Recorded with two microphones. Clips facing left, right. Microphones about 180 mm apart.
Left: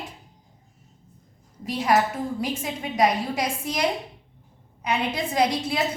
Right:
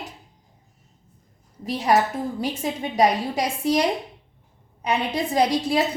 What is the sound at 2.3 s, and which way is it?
A woman's voice, 35° right (ahead or behind).